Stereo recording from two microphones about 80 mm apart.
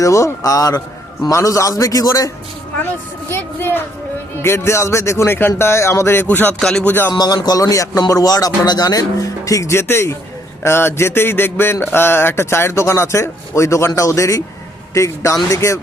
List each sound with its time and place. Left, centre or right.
0.0 s speech: left
1.3 s a sound: left
1.8 s speech: left
3.3 s speech: left
4.4 s a sound: left
6.2 s speech: left
6.6 s music: centre
6.8 s speech: left
7.1 s speech: left
9.8 s speech: left
10.6 s a sound: left